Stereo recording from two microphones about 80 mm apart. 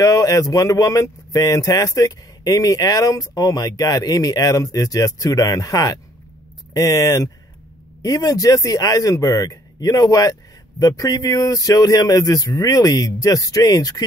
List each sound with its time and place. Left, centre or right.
0.0 s speech: left